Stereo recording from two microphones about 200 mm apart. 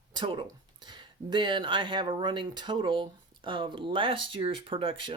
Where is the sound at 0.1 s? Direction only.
25° right (ahead or behind).